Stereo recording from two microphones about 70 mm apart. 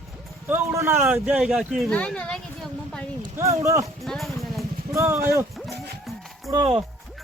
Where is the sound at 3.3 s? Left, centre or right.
Right.